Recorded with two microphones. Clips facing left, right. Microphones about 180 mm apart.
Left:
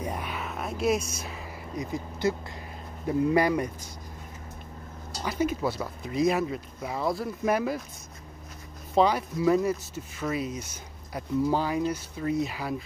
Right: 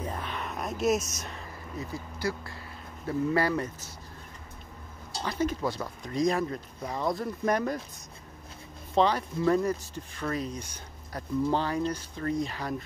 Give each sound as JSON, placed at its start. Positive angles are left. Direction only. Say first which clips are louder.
{"t": 0.0, "sound": "a sound", "louder": "left 2 dB", "side_deg": 10}
{"t": 1.8, "sound": "speech", "louder": "left 5 dB", "side_deg": 20}
{"t": 5.2, "sound": "speech", "louder": "left 2 dB", "side_deg": 10}
{"t": 8.9, "sound": "speech", "louder": "left 2 dB", "side_deg": 10}